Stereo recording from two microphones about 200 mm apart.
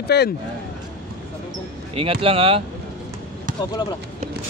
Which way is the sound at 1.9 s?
30° right (ahead or behind).